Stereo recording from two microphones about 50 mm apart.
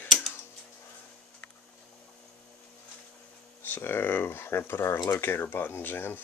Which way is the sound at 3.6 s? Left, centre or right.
Left.